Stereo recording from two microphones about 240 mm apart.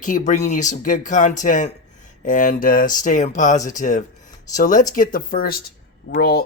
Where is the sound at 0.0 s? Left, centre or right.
Left.